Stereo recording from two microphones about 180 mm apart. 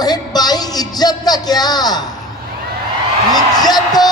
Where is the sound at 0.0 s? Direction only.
20° left (ahead or behind).